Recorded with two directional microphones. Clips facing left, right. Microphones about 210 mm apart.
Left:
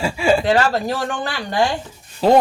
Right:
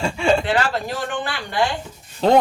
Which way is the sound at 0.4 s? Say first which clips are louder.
Left 4 dB; 40° left (ahead or behind).